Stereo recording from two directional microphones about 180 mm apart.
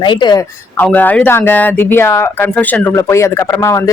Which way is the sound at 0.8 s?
10° left (ahead or behind).